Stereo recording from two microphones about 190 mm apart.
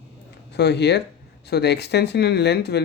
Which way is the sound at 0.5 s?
60° left (ahead or behind).